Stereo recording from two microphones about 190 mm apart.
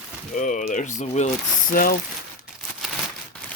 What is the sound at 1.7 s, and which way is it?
Speech, 50° left (ahead or behind).